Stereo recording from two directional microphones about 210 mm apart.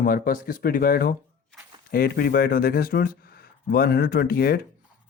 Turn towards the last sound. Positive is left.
turn(degrees=45)  # may be behind; listen again after turning